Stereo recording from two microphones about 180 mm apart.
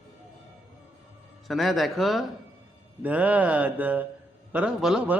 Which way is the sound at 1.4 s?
Centre (ahead or behind).